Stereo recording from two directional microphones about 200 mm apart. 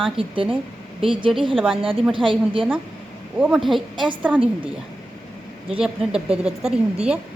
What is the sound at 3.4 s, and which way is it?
Speech, centre (ahead or behind).